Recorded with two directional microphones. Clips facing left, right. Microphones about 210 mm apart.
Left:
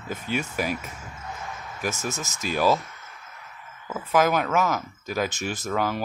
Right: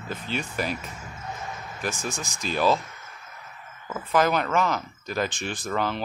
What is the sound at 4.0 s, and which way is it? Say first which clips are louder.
Speech: left 1 dB; 5° left (ahead or behind).